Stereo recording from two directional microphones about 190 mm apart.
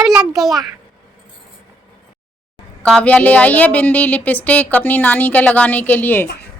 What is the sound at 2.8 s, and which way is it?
A child's voice, 5° left (ahead or behind).